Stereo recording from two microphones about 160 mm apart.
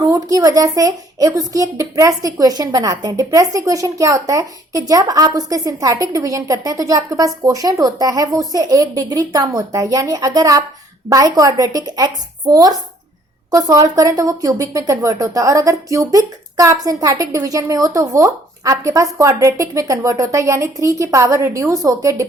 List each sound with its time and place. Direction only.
0.0 s speech: 20° right (ahead or behind)